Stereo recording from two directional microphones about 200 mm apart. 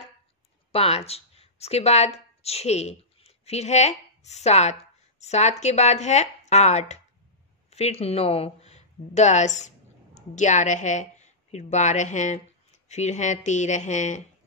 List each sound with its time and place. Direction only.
0.7 s a woman's voice: 30° left (ahead or behind)